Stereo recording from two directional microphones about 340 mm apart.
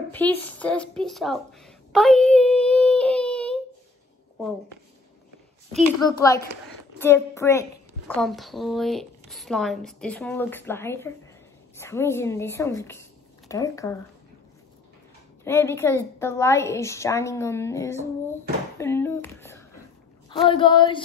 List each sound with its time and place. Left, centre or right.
0.1 s speech: centre
1.9 s child singing: centre
5.7 s a woman's voice: centre
6.0 s a woman's voice: centre
15.4 s a woman's voice: centre